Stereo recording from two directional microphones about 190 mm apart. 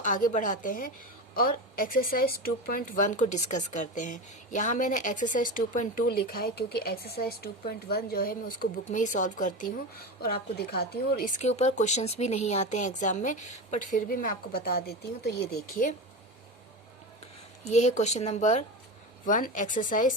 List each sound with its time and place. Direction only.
0.0 s speech: 45° left (ahead or behind)
8.8 s speech: 40° left (ahead or behind)
10.2 s speech: 55° left (ahead or behind)
17.7 s speech: 35° left (ahead or behind)